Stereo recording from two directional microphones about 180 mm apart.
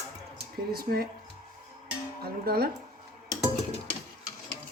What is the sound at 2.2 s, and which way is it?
Speech, 60° right (ahead or behind).